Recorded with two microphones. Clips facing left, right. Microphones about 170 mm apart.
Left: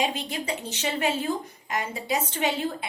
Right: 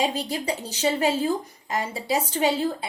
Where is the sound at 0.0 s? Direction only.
35° right (ahead or behind).